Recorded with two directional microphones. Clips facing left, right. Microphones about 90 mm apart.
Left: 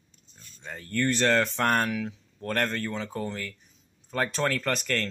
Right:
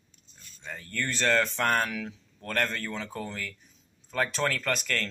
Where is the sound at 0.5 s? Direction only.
30° left (ahead or behind).